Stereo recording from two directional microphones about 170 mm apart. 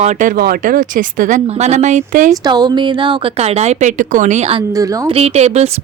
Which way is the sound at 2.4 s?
25° right (ahead or behind).